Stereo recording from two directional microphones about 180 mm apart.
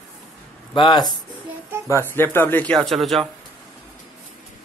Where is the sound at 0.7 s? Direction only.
25° left (ahead or behind).